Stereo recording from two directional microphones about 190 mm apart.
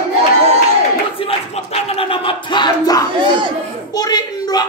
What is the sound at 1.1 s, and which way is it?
Battle cry, 30° left (ahead or behind).